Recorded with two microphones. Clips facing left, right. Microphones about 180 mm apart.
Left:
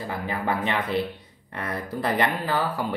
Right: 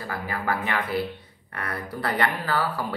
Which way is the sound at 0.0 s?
20° left (ahead or behind).